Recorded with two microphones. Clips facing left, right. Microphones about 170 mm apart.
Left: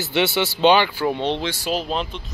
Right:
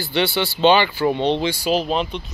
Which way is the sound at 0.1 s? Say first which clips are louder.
Even; 5° left (ahead or behind).